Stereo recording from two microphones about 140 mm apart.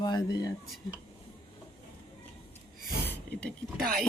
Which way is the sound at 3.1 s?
10° left (ahead or behind).